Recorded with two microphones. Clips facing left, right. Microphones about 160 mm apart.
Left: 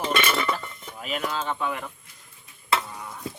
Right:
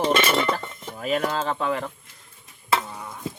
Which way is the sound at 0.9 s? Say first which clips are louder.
Right 6 dB; 40° right (ahead or behind).